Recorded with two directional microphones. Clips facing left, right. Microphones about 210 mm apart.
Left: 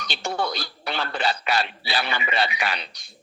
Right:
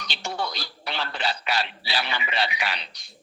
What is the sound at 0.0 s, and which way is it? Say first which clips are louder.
A man's voice: left 4 dB; 50° left (ahead or behind).